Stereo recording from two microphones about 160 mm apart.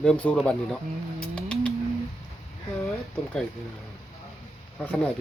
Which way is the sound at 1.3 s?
5° left (ahead or behind).